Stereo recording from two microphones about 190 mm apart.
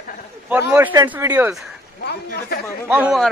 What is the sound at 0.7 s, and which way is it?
Speech, 10° right (ahead or behind).